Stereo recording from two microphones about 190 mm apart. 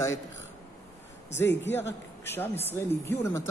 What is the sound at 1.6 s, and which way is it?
A woman's voice, 10° left (ahead or behind).